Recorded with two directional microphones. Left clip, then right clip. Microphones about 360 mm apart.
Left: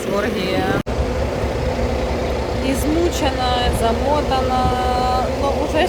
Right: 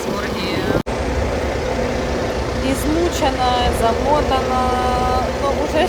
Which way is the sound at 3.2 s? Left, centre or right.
Centre.